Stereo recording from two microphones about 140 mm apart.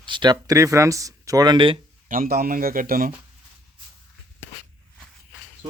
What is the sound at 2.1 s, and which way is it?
Speech, 85° right.